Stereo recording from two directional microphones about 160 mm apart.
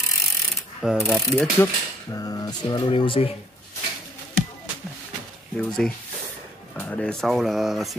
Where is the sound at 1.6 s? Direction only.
20° left (ahead or behind).